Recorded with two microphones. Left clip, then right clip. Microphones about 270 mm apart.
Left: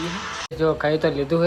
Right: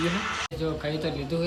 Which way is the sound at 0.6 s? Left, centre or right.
Centre.